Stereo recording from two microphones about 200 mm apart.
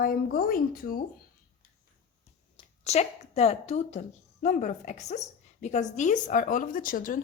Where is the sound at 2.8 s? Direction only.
35° left (ahead or behind).